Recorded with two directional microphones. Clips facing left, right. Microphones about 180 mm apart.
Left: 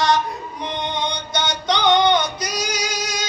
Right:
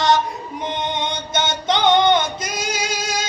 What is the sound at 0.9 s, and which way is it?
Music, 20° right (ahead or behind).